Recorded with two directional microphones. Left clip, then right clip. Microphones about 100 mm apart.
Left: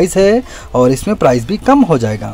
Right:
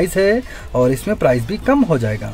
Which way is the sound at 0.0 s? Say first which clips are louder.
Left 5 dB; 30° left (ahead or behind).